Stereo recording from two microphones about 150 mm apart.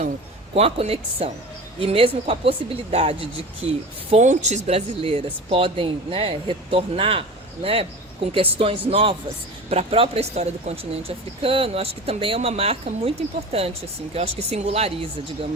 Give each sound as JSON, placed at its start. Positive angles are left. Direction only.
{"t": 0.5, "sound": "speech", "side_deg": -45}